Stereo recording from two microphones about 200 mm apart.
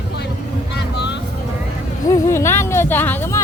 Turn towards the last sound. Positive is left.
turn(degrees=10)  # may be behind; listen again after turning